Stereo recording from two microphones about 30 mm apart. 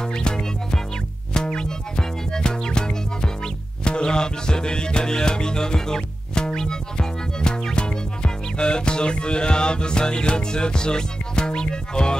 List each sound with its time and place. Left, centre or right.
0.0 s music: left